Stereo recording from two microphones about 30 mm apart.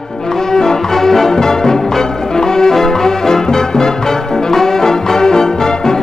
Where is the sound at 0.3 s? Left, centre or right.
Centre.